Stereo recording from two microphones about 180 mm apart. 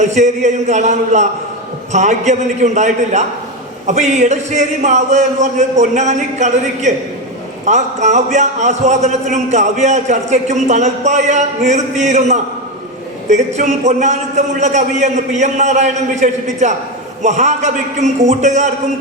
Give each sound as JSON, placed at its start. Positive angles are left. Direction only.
{"t": 0.0, "sound": "a man's voice", "side_deg": -40}